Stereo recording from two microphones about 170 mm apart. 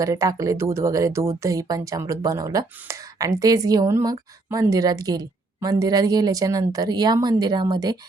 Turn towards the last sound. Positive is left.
turn(degrees=-20)  # may be behind; listen again after turning